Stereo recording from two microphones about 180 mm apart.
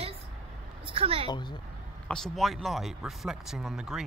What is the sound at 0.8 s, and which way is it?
Speech, 30° right (ahead or behind).